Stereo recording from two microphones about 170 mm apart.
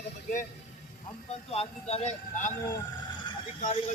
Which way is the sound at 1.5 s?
35° left (ahead or behind).